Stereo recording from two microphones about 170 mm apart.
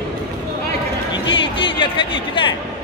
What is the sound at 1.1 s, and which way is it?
Music, 30° left (ahead or behind).